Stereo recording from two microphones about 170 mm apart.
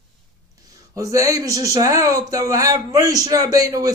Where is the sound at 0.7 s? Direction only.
20° right (ahead or behind).